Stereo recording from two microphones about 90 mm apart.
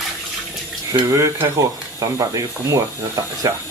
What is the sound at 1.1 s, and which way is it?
Speech, 35° right (ahead or behind).